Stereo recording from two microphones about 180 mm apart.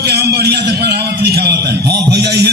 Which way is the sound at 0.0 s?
65° right (ahead or behind).